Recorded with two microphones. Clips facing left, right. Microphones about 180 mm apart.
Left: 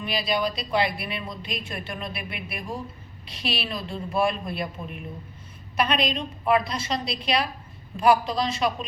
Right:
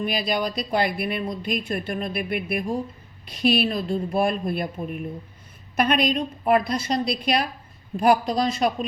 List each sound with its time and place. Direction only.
0.0 s speech: 50° right (ahead or behind)